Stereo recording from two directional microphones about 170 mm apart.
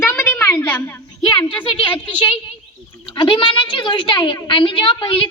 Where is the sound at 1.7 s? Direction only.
30° left (ahead or behind).